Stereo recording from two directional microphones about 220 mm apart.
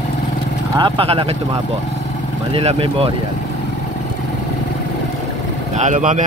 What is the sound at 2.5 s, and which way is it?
Speech, 25° right (ahead or behind).